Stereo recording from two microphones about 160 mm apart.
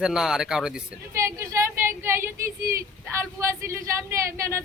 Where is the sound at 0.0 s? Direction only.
5° right (ahead or behind).